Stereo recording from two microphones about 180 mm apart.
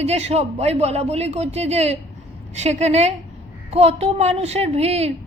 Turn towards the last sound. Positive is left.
turn(degrees=-35)  # may be behind; listen again after turning